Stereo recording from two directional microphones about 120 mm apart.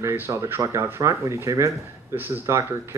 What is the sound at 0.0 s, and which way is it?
Speech, 20° right (ahead or behind).